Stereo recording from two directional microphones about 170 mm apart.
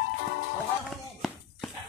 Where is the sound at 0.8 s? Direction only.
Centre (ahead or behind).